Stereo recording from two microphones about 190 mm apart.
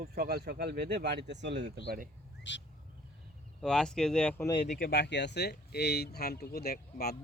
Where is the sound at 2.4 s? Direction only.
70° left (ahead or behind).